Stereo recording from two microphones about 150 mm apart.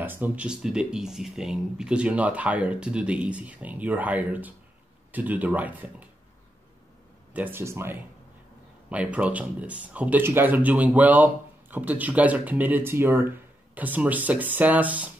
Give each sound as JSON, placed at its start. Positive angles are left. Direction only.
{"t": 0.0, "sound": "speech", "side_deg": -10}
{"t": 7.3, "sound": "speech", "side_deg": -15}